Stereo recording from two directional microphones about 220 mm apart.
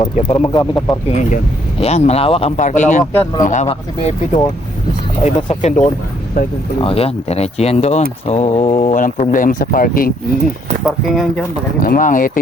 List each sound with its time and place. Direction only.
0.0 s speech: 25° left (ahead or behind)
3.0 s speech: 15° left (ahead or behind)
3.4 s speech: 35° left (ahead or behind)
10.8 s speech: centre (ahead or behind)
11.8 s speech: 40° left (ahead or behind)